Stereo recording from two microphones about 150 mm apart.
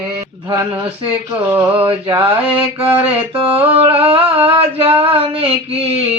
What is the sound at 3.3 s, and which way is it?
Female singing, 40° right (ahead or behind).